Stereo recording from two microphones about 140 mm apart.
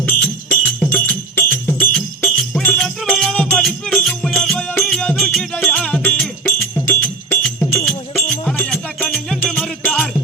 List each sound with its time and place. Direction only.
0.0 s music: 10° left (ahead or behind)
6.4 s music: 20° left (ahead or behind); by 9.6 s centre (ahead or behind)
9.8 s jingle bell: 10° left (ahead or behind)